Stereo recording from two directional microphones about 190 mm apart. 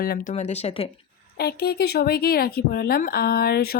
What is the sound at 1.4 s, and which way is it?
Speech, 55° left (ahead or behind).